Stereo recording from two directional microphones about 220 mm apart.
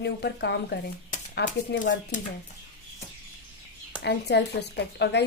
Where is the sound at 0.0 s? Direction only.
50° left (ahead or behind).